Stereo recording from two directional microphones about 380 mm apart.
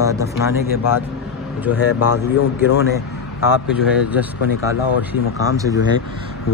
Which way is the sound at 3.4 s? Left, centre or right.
Centre.